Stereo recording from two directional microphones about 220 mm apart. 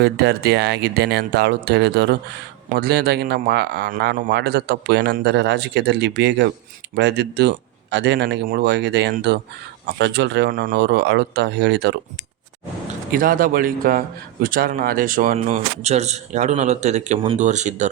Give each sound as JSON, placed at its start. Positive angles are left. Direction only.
{"t": 0.0, "sound": "a man's voice", "side_deg": -45}
{"t": 13.1, "sound": "speech", "side_deg": -40}